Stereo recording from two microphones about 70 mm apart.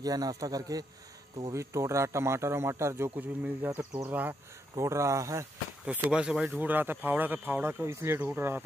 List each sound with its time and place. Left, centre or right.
0.0 s a man's voice: right
1.4 s speech: right
3.2 s speech: right
4.7 s speech: right
5.9 s speech: centre
6.6 s speech: right